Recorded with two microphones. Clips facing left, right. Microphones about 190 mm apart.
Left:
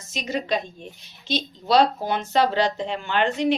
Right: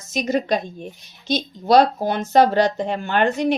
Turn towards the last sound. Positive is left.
turn(degrees=-45)  # may be behind; listen again after turning